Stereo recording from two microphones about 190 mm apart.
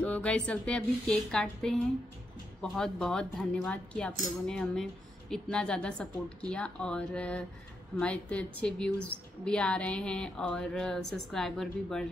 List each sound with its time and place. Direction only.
0.0 s speech: 5° left (ahead or behind)